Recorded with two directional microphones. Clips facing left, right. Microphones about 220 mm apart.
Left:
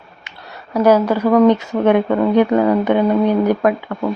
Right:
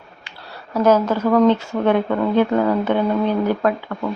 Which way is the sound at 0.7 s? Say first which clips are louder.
Left 3 dB; 10° left (ahead or behind).